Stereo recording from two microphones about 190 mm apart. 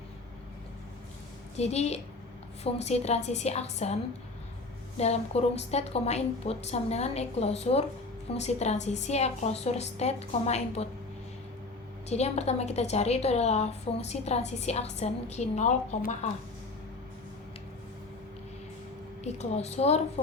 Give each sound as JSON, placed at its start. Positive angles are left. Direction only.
{"t": 1.5, "sound": "a woman's voice", "side_deg": 35}
{"t": 4.9, "sound": "a woman's voice", "side_deg": 35}
{"t": 12.0, "sound": "a woman's voice", "side_deg": 35}
{"t": 19.2, "sound": "a woman's voice", "side_deg": 35}